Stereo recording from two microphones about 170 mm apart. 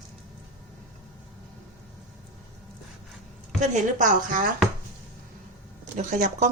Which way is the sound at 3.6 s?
50° right (ahead or behind).